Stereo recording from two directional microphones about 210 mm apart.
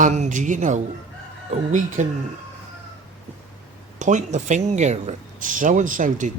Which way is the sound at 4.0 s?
35° right (ahead or behind).